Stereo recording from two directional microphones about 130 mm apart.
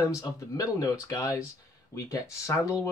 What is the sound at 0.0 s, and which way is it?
Speech, 25° left (ahead or behind).